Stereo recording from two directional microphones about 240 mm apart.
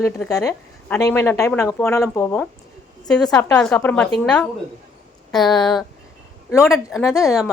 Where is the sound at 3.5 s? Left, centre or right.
Centre.